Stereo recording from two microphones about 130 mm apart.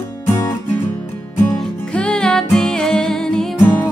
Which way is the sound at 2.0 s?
5° left (ahead or behind).